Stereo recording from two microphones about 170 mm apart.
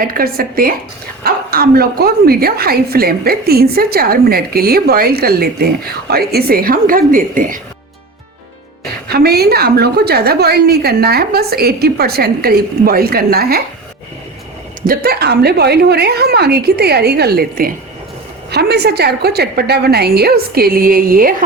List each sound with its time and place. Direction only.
0.0 s a woman's voice: 60° right (ahead or behind)
9.0 s a woman's voice: 65° right (ahead or behind)
14.8 s a woman's voice: 65° right (ahead or behind)
18.5 s a woman's voice: 70° right (ahead or behind)